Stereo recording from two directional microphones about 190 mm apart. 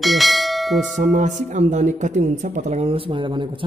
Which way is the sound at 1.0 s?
40° right (ahead or behind).